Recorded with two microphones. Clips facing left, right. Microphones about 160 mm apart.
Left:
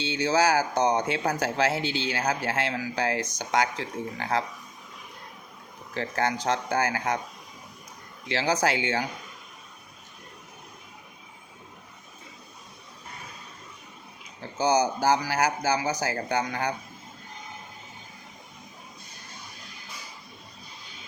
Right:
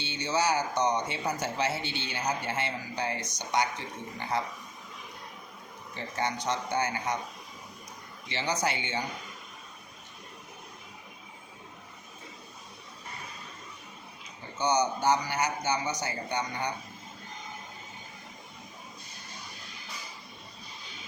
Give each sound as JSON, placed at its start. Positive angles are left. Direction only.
{"t": 0.0, "sound": "speech", "side_deg": 90}
{"t": 5.9, "sound": "speech", "side_deg": 90}
{"t": 8.3, "sound": "speech", "side_deg": 90}
{"t": 14.6, "sound": "speech", "side_deg": 90}